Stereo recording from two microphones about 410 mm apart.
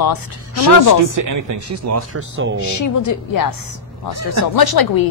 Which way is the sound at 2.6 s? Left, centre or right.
Left.